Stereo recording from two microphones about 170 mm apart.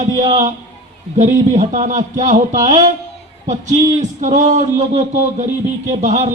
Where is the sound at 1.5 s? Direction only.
45° right (ahead or behind).